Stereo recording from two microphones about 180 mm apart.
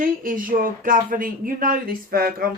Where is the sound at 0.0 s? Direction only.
50° right (ahead or behind).